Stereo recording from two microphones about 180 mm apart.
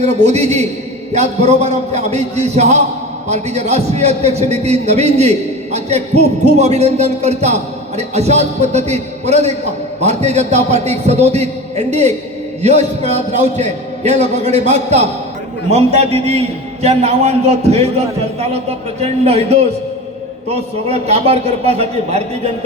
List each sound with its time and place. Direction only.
0.0 s a man's voice: 40° right (ahead or behind)
18.9 s a man's voice: 35° right (ahead or behind)